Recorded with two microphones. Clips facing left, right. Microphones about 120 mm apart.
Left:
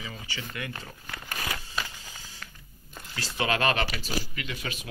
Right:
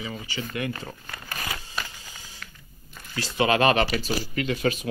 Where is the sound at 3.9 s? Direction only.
40° right (ahead or behind).